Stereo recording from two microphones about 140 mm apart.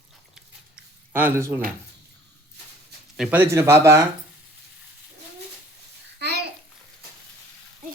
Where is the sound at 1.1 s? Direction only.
15° right (ahead or behind).